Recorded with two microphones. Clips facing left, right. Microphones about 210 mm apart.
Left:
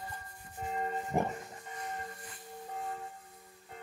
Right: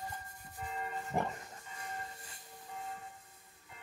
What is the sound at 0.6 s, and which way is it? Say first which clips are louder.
Music: left 5 dB; 40° left (ahead or behind).